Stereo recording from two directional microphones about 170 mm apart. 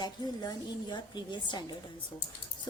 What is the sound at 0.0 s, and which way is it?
A woman's voice, 25° left (ahead or behind).